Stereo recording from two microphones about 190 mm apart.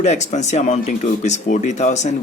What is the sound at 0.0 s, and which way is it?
Speech, 35° left (ahead or behind).